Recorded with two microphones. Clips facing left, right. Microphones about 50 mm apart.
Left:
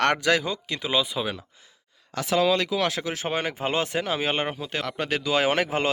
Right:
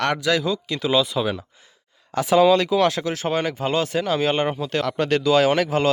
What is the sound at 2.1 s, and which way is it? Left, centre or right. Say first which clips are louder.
Speech: right 7 dB; centre.